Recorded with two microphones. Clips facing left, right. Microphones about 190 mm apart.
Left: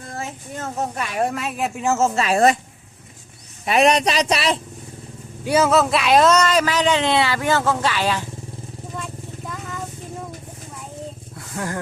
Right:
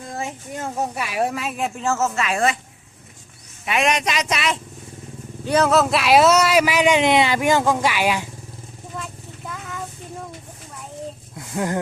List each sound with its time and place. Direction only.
0.1 s speech: 15° right (ahead or behind); by 1.8 s centre (ahead or behind)
1.8 s speech: 25° left (ahead or behind)
3.7 s speech: 35° left (ahead or behind)
5.5 s speech: 5° left (ahead or behind); by 8.3 s 10° right (ahead or behind)
9.0 s vehicle: centre (ahead or behind)
11.3 s a sound: 20° right (ahead or behind)